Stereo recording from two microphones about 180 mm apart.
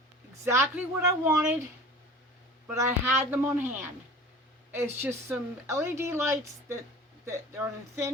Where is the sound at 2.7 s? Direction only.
10° right (ahead or behind).